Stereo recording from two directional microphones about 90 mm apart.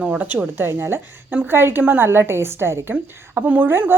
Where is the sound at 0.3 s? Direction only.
25° right (ahead or behind).